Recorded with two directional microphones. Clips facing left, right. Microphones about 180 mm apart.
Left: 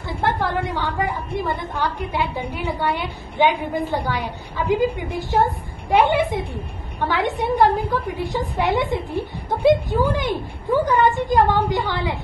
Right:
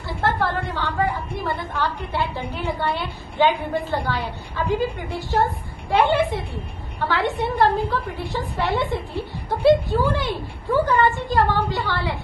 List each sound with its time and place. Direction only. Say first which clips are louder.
0.2 s a woman's voice: left 1 dB; 15° left (ahead or behind)